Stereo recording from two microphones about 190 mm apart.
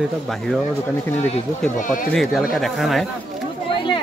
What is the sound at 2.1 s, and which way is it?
Speech, centre (ahead or behind).